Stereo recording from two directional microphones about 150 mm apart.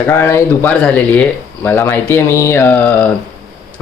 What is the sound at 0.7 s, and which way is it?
Speech, 5° left (ahead or behind).